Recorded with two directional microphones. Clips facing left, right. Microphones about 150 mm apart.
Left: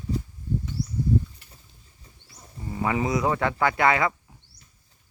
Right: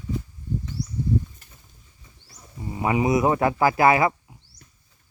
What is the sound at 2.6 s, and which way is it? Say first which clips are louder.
Speech: right 3 dB; 20° right (ahead or behind).